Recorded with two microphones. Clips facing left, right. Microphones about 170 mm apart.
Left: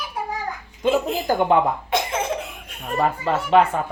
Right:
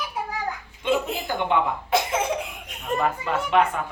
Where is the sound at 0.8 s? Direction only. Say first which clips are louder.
Left 4 dB; 40° left (ahead or behind).